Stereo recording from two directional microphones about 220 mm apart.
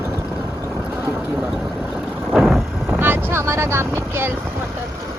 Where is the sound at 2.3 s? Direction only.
Centre (ahead or behind).